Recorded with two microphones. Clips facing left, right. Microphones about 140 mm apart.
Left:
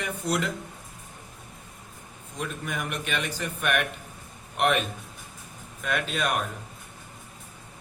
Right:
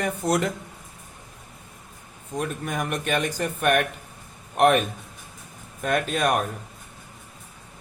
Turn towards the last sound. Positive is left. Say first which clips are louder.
# right 5 dB
turn(degrees=-45)  # may be behind; listen again after turning